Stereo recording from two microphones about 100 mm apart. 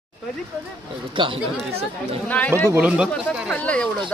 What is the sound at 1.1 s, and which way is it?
Speech, 55° right (ahead or behind).